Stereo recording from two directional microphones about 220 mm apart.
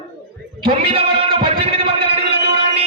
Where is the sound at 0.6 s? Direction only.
25° right (ahead or behind).